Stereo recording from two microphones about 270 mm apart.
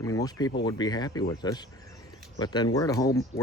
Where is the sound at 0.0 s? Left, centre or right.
Centre.